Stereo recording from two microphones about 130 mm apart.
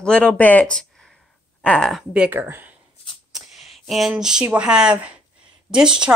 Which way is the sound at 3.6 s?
Centre (ahead or behind).